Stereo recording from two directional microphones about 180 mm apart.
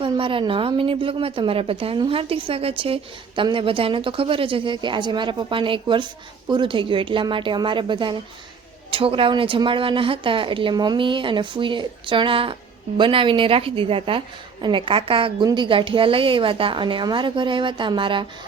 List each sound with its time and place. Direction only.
0.0 s a woman's voice: 30° right (ahead or behind)